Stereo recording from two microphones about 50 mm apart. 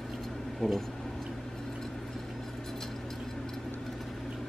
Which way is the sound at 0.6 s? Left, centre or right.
Centre.